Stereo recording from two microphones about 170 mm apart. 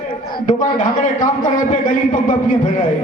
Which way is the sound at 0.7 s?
50° left (ahead or behind).